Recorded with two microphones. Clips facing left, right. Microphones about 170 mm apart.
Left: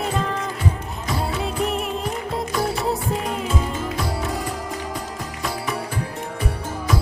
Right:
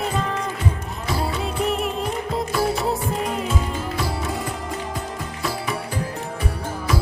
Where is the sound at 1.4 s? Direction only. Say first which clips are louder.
Right 1 dB; centre (ahead or behind).